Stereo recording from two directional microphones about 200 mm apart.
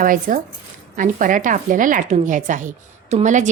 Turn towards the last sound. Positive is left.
turn(degrees=-40)  # may be behind; listen again after turning